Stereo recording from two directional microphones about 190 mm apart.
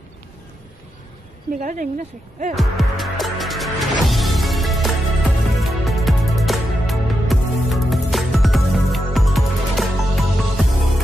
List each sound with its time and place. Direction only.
1.6 s speech: 45° right (ahead or behind)
2.5 s music: centre (ahead or behind)